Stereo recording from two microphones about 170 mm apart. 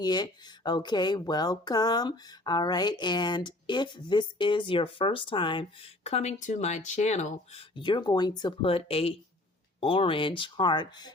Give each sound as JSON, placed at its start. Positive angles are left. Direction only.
{"t": 0.0, "sound": "speech", "side_deg": 25}
{"t": 7.8, "sound": "speech", "side_deg": 25}